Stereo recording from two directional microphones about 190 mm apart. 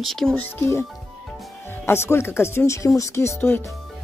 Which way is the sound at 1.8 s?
15° left (ahead or behind).